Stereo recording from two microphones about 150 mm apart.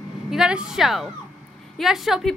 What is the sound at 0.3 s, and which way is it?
A woman's voice, 5° right (ahead or behind).